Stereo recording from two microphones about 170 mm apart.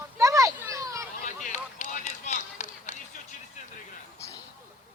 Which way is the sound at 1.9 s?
45° left (ahead or behind).